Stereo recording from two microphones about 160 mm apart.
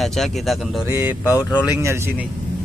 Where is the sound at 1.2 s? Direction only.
25° left (ahead or behind).